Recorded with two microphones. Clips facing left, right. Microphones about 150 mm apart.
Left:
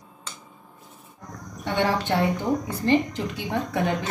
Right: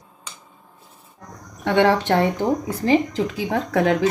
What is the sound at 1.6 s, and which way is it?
A woman's voice, 80° right.